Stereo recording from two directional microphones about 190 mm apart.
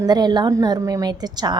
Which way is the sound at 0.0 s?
20° right (ahead or behind).